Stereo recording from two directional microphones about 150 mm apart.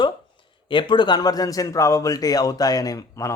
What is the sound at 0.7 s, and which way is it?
Speech, 30° left (ahead or behind).